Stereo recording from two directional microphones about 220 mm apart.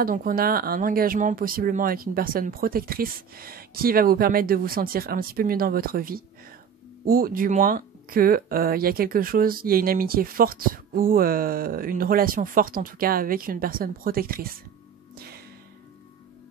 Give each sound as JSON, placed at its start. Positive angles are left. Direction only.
{"t": 0.0, "sound": "speech", "side_deg": -40}
{"t": 15.1, "sound": "whip", "side_deg": -45}